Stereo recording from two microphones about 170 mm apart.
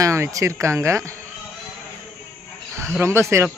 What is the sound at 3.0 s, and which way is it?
Speech, 15° right (ahead or behind).